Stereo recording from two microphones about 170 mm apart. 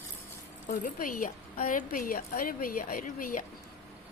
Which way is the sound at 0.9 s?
55° left (ahead or behind).